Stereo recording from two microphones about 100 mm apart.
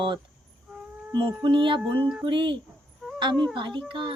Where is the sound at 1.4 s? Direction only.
55° right (ahead or behind).